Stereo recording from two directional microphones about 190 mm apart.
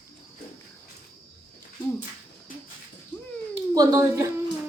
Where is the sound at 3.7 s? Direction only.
20° right (ahead or behind).